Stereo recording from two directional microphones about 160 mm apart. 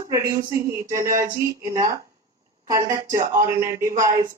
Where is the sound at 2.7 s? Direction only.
20° right (ahead or behind).